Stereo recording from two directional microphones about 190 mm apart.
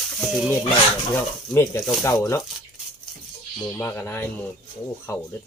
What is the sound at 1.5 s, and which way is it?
Speech, 15° left (ahead or behind).